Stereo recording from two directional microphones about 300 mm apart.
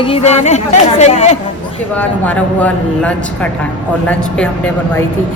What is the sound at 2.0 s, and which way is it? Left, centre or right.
Speech, centre.